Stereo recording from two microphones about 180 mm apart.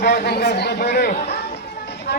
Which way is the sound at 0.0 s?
65° left (ahead or behind).